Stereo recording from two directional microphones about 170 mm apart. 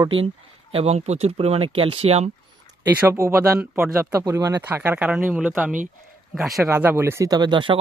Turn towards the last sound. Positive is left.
turn(degrees=-30)  # may be behind; listen again after turning